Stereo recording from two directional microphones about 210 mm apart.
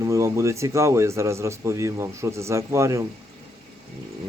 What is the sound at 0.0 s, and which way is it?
A man's voice, 15° right (ahead or behind).